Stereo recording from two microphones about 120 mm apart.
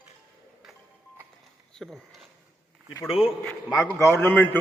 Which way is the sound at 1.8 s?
Centre (ahead or behind).